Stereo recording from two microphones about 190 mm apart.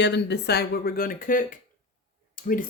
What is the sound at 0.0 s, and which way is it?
Speech, 65° left (ahead or behind).